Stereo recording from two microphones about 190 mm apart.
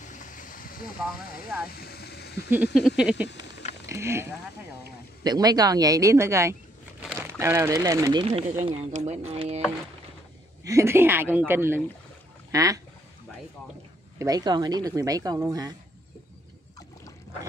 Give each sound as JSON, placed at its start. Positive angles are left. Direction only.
{"t": 0.0, "sound": "a sound", "side_deg": 40}
{"t": 1.7, "sound": "speech", "side_deg": 55}
{"t": 2.5, "sound": "speech", "side_deg": -5}
{"t": 3.0, "sound": "a sound", "side_deg": -5}
{"t": 3.8, "sound": "speech", "side_deg": -15}
{"t": 8.3, "sound": "speech", "side_deg": -40}
{"t": 10.6, "sound": "speech", "side_deg": -15}
{"t": 14.1, "sound": "speech", "side_deg": -20}